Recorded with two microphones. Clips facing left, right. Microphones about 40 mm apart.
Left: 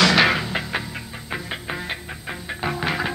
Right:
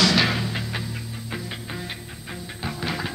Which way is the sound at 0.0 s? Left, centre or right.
Left.